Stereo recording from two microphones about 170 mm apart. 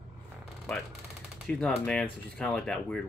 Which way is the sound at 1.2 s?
Centre (ahead or behind).